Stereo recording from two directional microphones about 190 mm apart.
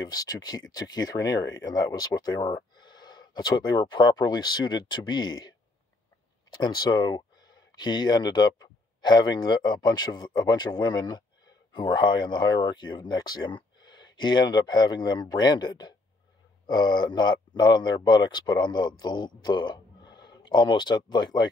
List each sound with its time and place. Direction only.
0.0 s speech: 20° left (ahead or behind)
6.6 s speech: 25° left (ahead or behind)